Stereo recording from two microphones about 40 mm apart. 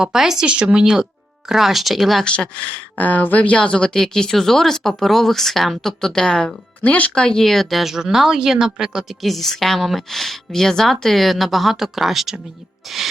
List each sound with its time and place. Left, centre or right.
0.0 s a woman's voice: centre
0.4 s speech: right
1.5 s a woman's voice: centre
3.0 s speech: left
3.9 s speech: centre
6.8 s speech: left
7.1 s speech: left
7.4 s a woman's voice: centre
9.0 s a woman's voice: centre